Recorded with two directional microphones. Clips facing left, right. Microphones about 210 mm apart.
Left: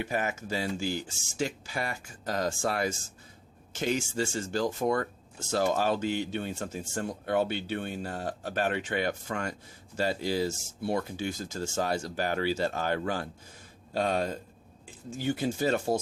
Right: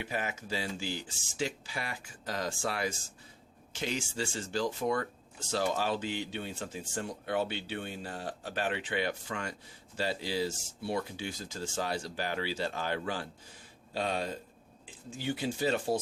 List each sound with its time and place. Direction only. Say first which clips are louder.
0.0 s speech: left 5 dB; 45° left (ahead or behind)